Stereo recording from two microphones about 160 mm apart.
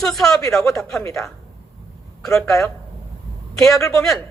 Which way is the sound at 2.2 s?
5° left (ahead or behind).